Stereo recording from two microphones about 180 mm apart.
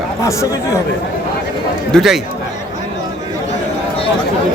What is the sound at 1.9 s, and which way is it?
Speech, centre (ahead or behind).